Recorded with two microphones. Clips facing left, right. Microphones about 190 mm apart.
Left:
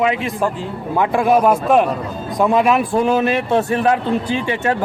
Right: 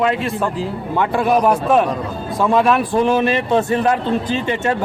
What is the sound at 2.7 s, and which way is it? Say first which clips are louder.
Speech: even; 5° left (ahead or behind).